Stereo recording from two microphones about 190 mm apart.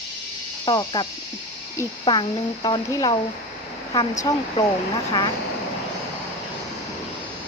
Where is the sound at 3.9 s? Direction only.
20° left (ahead or behind).